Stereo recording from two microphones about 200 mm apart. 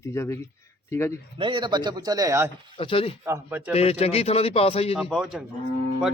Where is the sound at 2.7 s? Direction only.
25° left (ahead or behind).